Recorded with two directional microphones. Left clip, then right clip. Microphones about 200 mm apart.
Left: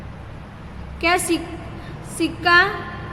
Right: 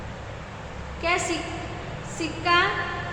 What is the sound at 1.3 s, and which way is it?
A woman's voice, 40° left (ahead or behind).